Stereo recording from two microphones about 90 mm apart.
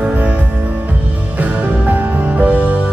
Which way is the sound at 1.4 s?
15° right (ahead or behind).